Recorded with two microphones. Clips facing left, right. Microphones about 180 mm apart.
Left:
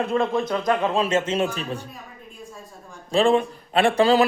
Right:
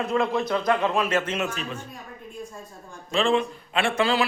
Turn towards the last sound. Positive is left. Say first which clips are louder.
# left 6 dB
turn(degrees=35)  # may be behind; listen again after turning